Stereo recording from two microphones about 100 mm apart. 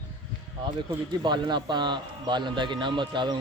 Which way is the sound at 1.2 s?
50° right (ahead or behind).